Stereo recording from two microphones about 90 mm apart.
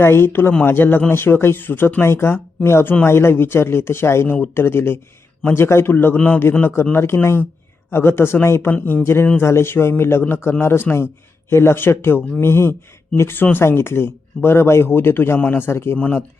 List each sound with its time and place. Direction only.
0.0 s a man's voice: 25° left (ahead or behind)